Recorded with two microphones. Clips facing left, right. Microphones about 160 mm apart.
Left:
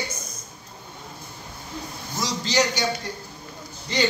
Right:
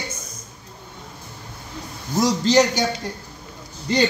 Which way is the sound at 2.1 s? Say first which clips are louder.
Right 9 dB; 50° right (ahead or behind).